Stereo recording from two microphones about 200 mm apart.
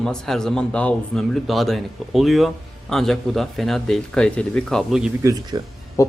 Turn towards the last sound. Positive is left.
turn(degrees=15)  # may be behind; listen again after turning